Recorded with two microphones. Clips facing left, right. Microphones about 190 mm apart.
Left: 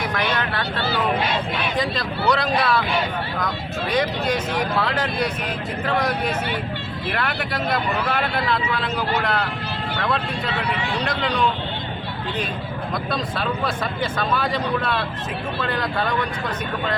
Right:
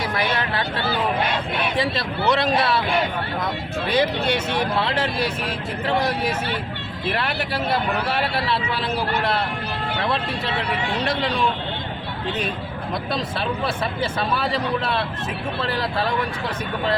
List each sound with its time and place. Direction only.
1.8 s speech: 25° right (ahead or behind)
3.9 s speech: 30° right (ahead or behind)
7.2 s speech: 30° right (ahead or behind)
12.9 s speech: 25° right (ahead or behind)